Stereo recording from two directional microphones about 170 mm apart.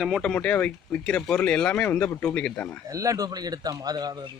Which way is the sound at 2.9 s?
20° right (ahead or behind).